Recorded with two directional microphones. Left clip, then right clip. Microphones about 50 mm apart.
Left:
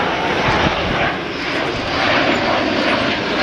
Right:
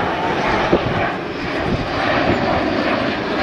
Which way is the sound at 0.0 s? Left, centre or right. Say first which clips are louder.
Left 2 dB; centre.